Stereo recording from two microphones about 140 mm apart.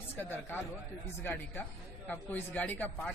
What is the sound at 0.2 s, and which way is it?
A man's voice, 15° left (ahead or behind).